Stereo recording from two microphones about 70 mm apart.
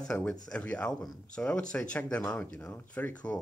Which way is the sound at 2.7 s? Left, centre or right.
Left.